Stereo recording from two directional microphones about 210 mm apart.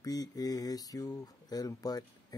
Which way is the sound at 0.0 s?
15° left (ahead or behind).